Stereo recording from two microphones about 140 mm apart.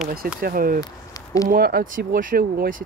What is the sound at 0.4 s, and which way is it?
Speech, 90° right.